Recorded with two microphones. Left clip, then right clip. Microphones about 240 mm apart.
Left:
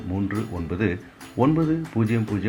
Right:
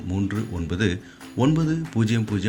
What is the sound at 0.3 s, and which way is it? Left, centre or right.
Speech, right.